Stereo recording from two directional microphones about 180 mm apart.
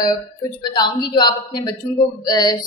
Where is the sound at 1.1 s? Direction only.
20° left (ahead or behind).